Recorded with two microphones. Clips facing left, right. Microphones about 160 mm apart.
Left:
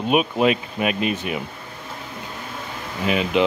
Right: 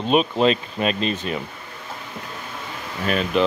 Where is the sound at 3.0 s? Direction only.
15° left (ahead or behind).